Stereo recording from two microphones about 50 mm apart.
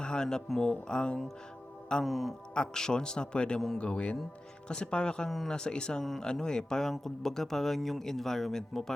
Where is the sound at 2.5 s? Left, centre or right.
Centre.